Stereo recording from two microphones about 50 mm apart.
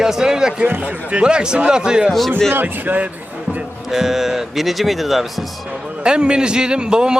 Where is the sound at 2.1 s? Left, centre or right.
Centre.